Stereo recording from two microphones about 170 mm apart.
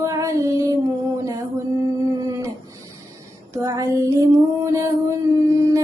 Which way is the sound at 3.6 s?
20° right (ahead or behind).